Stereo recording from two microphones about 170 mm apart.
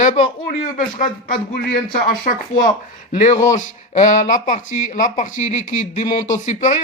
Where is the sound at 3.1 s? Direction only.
40° left (ahead or behind).